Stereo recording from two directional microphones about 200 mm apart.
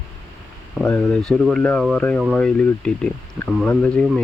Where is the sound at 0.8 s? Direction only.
5° left (ahead or behind).